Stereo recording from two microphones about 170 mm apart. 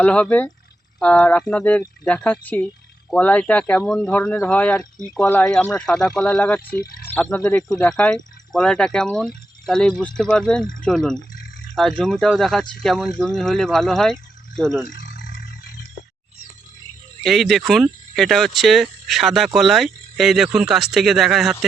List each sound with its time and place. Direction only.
0.0 s speech: 5° left (ahead or behind)
14.8 s speech: 50° left (ahead or behind)
15.1 s a sound: 70° left (ahead or behind)
17.2 s speech: centre (ahead or behind)